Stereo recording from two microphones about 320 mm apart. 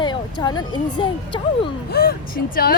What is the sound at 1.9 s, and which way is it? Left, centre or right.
Speech, left.